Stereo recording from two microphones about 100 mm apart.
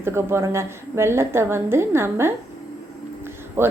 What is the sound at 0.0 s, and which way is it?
A woman's voice, 25° right (ahead or behind).